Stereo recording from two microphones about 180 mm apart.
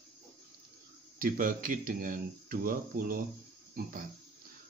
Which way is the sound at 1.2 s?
50° right (ahead or behind).